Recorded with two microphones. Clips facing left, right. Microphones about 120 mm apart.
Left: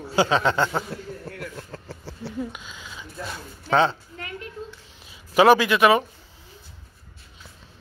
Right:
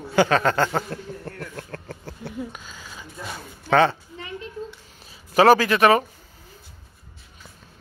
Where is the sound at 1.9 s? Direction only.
10° left (ahead or behind).